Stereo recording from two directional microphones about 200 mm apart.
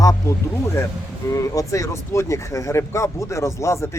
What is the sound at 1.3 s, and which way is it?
Speech, 15° left (ahead or behind).